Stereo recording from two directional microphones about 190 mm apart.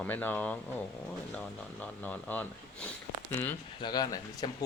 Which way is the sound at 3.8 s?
20° left (ahead or behind).